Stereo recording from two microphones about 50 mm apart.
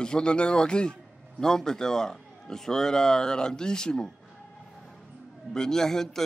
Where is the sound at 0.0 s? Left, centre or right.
Centre.